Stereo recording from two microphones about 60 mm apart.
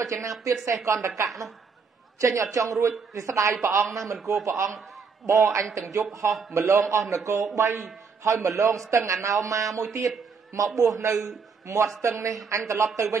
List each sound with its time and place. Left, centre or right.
0.0 s a man's voice: right
3.6 s a man's voice: right
4.2 s a man's voice: centre
4.5 s a man's voice: right
6.5 s a man's voice: right
8.2 s a man's voice: right